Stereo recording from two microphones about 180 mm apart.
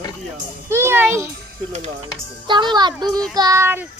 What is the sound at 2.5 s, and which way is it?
A child's voice, 25° right (ahead or behind).